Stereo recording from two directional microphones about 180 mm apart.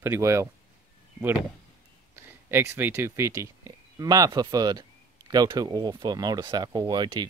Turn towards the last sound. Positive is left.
turn(degrees=-25)  # may be behind; listen again after turning